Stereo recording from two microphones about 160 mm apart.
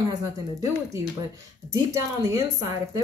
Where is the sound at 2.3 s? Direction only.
20° right (ahead or behind).